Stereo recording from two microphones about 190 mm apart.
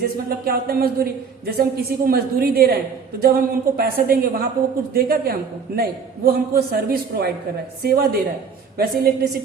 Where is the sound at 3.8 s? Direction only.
50° right (ahead or behind).